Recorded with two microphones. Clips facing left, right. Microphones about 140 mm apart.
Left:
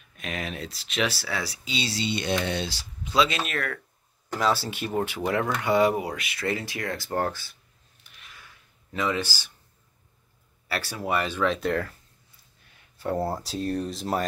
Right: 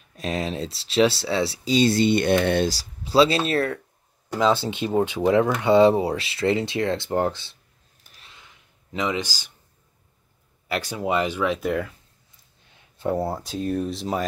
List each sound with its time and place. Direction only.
0.1 s speech: 35° right (ahead or behind)
1.7 s speech: 50° right (ahead or behind)
2.7 s speech: 35° right (ahead or behind)
8.0 s a sound: 40° right (ahead or behind)
8.3 s a sound: 20° right (ahead or behind)
10.7 s speech: 15° right (ahead or behind)
13.1 s speech: centre (ahead or behind)